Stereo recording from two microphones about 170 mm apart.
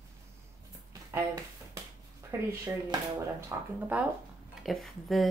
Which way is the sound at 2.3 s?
15° right (ahead or behind).